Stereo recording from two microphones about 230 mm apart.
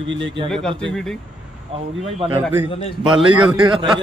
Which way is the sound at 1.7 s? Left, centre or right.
Right.